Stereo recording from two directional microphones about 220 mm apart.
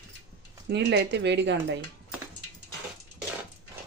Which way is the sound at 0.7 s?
50° right (ahead or behind).